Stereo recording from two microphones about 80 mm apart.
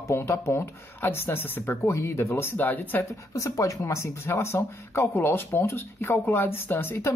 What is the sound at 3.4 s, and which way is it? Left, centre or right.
Speech, left.